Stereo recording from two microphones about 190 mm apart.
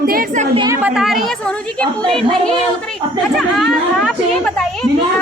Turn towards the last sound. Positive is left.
turn(degrees=0)  # may be behind; listen again after turning